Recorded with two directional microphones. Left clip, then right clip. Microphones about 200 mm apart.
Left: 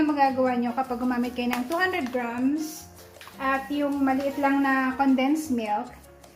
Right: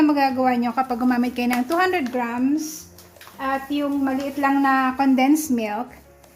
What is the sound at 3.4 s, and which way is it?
Speech, 50° right (ahead or behind).